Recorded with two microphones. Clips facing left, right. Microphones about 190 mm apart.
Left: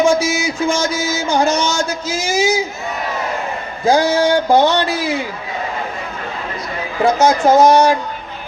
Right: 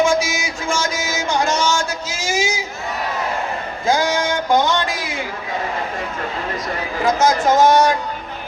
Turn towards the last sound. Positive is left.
turn(degrees=30)  # may be behind; listen again after turning